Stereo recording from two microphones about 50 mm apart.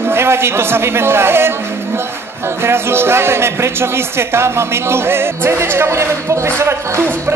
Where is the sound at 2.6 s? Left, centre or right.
Right.